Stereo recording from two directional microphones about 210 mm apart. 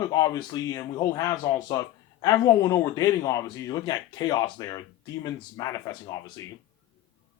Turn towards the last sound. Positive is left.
turn(degrees=15)  # may be behind; listen again after turning